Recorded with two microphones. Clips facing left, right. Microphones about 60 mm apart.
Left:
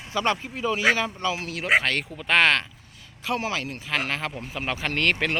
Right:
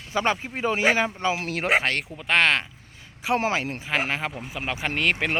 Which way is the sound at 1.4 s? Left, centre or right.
Right.